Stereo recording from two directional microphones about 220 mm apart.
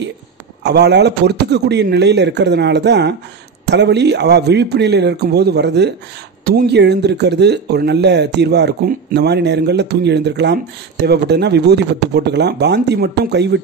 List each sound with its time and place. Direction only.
0.7 s speech: 50° right (ahead or behind)